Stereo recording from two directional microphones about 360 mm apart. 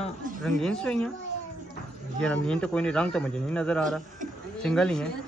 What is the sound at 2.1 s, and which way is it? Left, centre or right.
Speech, centre.